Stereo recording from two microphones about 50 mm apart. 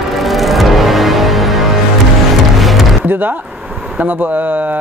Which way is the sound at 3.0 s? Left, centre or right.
Right.